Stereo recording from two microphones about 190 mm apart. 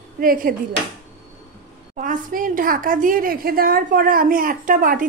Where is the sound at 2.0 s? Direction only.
45° right (ahead or behind).